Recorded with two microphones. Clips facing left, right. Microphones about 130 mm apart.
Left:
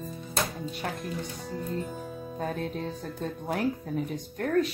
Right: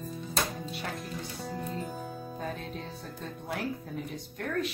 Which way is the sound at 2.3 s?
50° left (ahead or behind).